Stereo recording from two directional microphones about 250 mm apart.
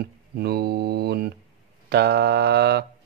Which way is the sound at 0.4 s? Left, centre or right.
Right.